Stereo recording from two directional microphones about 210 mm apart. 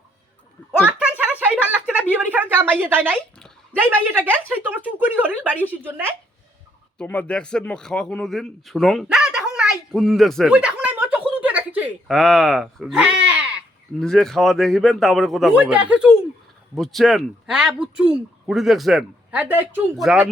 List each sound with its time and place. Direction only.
0.7 s a sound: 5° right (ahead or behind)
3.8 s a woman's voice: 10° right (ahead or behind)
7.0 s a man's voice: 5° left (ahead or behind)